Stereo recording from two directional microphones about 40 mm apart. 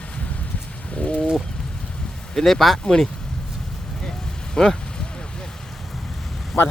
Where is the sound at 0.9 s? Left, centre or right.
Left.